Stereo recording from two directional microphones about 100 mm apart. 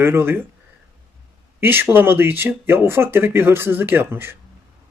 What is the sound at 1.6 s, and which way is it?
Speech, 20° right (ahead or behind).